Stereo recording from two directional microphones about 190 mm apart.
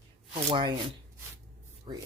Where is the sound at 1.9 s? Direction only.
30° right (ahead or behind).